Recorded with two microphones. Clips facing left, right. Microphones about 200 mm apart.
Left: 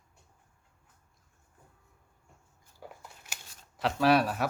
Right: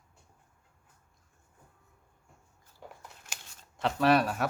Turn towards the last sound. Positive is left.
turn(degrees=0)  # may be behind; listen again after turning